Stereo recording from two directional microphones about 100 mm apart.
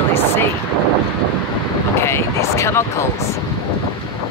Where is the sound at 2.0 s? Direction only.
25° left (ahead or behind).